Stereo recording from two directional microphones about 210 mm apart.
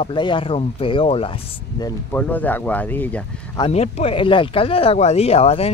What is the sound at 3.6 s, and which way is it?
Speech, 30° left (ahead or behind).